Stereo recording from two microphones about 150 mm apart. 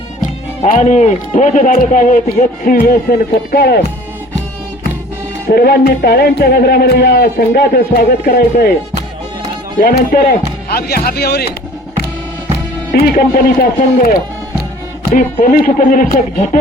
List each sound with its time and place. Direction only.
0.8 s a man's voice: 50° left (ahead or behind); by 3.8 s 90° left
5.5 s a man's voice: 90° left
9.8 s a man's voice: 65° left (ahead or behind)
10.7 s a man's voice: 90° left
12.9 s speech: 65° left (ahead or behind)
15.1 s a man's voice: 60° left (ahead or behind)